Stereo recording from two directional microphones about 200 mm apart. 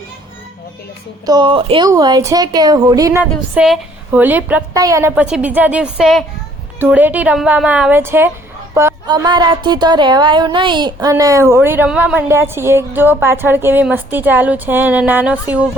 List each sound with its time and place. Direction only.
1.2 s a woman's voice: 20° right (ahead or behind)